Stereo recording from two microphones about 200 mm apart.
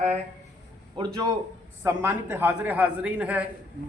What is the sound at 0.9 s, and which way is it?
A man's voice, 20° right (ahead or behind).